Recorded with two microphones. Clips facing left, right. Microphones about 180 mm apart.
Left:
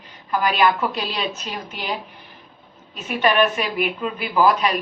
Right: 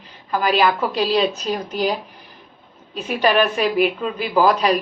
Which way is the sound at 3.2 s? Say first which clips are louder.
Right 2 dB; 35° right (ahead or behind).